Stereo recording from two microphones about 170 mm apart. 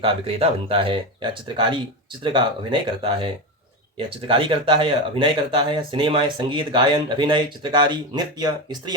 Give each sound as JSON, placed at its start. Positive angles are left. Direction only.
{"t": 0.0, "sound": "speech", "side_deg": -35}